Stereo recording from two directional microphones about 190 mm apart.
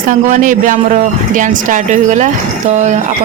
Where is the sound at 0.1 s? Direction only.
45° right (ahead or behind).